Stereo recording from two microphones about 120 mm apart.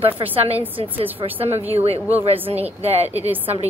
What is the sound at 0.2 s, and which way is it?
Speech, 55° right (ahead or behind).